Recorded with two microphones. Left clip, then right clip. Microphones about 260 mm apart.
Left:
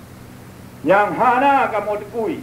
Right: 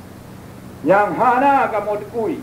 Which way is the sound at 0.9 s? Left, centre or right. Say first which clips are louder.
Even; right.